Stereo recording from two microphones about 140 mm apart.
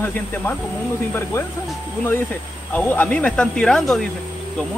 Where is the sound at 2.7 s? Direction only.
10° left (ahead or behind).